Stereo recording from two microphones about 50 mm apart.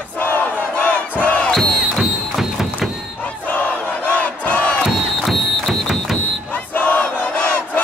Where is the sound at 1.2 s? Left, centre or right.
Left.